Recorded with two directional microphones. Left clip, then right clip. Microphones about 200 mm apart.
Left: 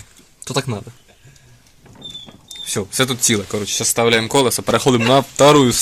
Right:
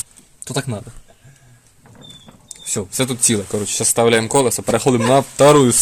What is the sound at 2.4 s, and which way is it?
Speech, centre (ahead or behind).